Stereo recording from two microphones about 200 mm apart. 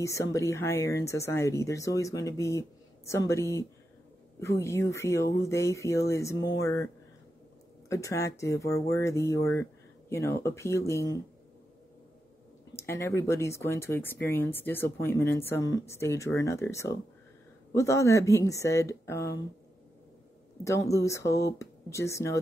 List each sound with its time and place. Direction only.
0.0 s speech: 15° left (ahead or behind)
7.9 s speech: 15° left (ahead or behind)
12.7 s speech: 15° left (ahead or behind)
20.6 s speech: 15° left (ahead or behind)